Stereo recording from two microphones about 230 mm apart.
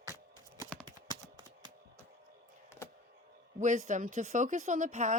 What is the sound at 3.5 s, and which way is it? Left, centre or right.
Speech, right.